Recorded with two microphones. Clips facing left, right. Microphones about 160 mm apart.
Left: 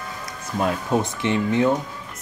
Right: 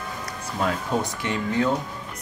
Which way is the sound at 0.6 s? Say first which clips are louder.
Left 3 dB; 25° left (ahead or behind).